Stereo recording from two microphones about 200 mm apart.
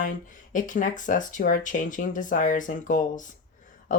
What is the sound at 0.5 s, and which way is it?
Speech, 40° left (ahead or behind).